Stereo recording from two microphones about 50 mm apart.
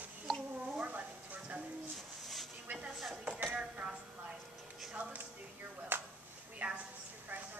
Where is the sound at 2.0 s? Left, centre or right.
Centre.